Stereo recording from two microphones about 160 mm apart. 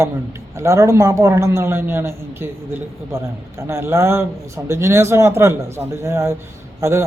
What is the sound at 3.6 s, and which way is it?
Speech, 15° right (ahead or behind).